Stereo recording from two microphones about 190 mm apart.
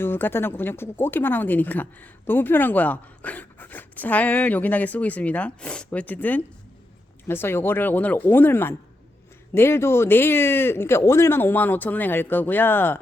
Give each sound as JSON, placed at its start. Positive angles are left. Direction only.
{"t": 0.0, "sound": "speech", "side_deg": 10}